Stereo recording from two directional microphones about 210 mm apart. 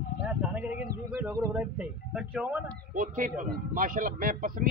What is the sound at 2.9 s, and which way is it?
Speech, 40° right (ahead or behind).